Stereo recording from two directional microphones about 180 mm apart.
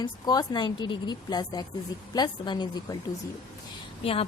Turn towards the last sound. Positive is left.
turn(degrees=30)  # may be behind; listen again after turning